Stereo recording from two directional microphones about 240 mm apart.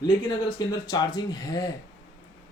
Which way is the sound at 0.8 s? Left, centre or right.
Centre.